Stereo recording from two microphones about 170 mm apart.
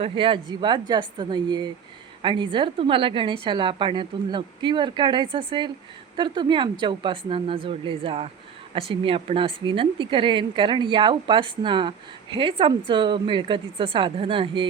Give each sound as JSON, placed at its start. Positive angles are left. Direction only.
{"t": 0.0, "sound": "a woman's voice", "side_deg": -30}